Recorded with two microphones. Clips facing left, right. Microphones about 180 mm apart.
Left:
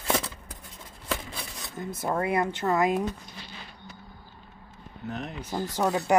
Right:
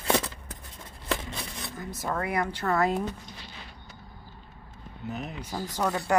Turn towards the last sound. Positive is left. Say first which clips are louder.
# left 3 dB
turn(degrees=20)  # may be behind; listen again after turning